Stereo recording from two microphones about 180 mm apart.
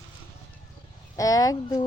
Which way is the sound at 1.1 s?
20° left (ahead or behind).